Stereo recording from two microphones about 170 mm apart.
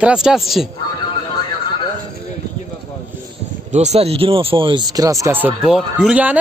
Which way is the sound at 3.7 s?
40° right (ahead or behind).